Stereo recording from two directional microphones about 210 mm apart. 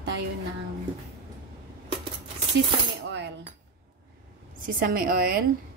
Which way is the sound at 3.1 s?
55° right (ahead or behind).